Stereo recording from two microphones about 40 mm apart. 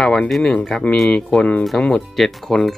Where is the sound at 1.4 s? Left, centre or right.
Left.